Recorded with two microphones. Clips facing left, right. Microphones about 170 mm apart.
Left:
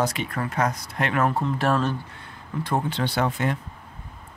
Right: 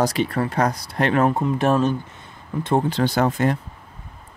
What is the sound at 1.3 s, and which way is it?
Speech, 20° right (ahead or behind).